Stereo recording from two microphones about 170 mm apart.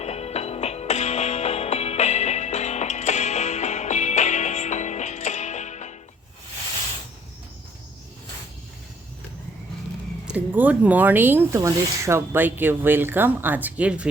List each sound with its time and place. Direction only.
0.0 s music: 40° left (ahead or behind)
10.3 s speech: 10° right (ahead or behind)